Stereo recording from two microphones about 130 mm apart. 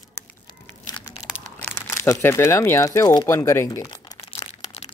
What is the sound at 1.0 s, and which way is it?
Crunch, 30° left (ahead or behind).